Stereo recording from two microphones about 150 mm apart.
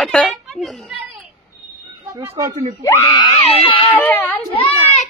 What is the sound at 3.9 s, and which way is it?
Speech, 10° left (ahead or behind).